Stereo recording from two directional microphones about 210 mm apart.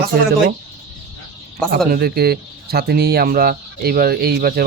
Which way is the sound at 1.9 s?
50° right (ahead or behind).